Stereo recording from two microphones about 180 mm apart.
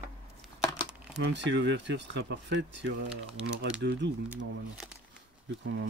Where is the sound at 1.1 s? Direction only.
80° right.